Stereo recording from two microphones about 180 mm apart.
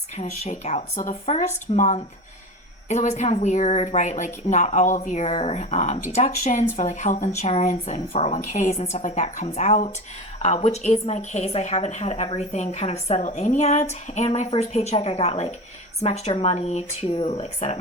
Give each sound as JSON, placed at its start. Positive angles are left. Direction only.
{"t": 0.2, "sound": "a woman's voice", "side_deg": 40}